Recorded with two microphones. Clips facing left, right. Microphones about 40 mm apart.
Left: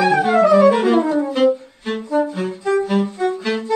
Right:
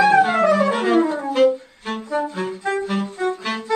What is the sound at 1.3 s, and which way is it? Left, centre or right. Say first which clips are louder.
Saxophone: even; centre.